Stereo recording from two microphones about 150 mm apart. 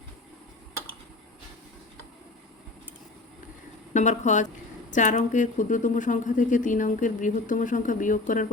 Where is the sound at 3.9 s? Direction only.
55° left (ahead or behind).